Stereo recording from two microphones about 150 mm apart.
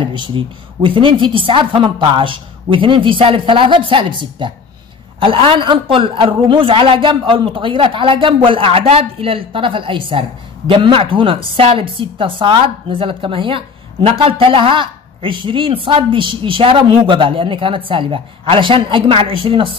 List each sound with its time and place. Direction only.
0.0 s a woman's voice: 30° right (ahead or behind)